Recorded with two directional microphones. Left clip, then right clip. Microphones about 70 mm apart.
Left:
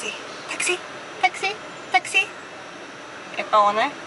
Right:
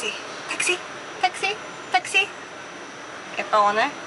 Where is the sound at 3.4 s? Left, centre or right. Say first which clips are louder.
Left 1 dB; centre.